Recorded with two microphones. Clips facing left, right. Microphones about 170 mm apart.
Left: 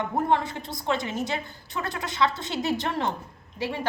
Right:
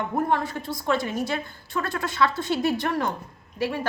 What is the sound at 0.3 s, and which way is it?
A woman's voice, 20° left (ahead or behind).